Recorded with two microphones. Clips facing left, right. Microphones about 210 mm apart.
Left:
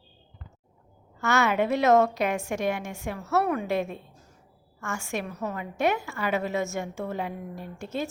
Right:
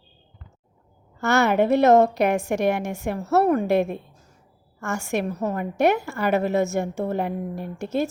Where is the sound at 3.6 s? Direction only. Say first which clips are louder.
Right 7 dB; 65° right (ahead or behind).